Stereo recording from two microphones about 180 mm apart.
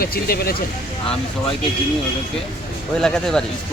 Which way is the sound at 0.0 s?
55° left (ahead or behind).